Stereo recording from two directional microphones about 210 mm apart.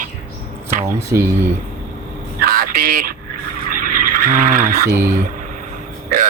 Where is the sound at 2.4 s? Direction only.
45° right (ahead or behind).